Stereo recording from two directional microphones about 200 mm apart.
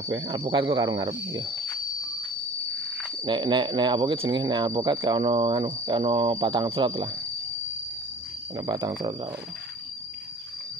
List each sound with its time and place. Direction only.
0.1 s speech: 25° right (ahead or behind)
3.3 s speech: 25° right (ahead or behind)
8.5 s speech: 20° right (ahead or behind)